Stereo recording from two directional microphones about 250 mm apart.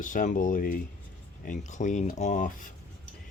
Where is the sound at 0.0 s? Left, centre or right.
Left.